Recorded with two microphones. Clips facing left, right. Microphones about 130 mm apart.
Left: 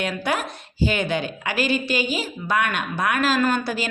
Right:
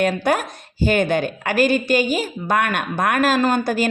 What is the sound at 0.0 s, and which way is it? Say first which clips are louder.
A woman's voice: right 6 dB; 45° right (ahead or behind).